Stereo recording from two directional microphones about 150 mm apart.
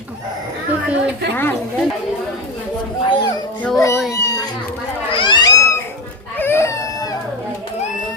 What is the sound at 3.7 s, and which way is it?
Speech, 20° left (ahead or behind).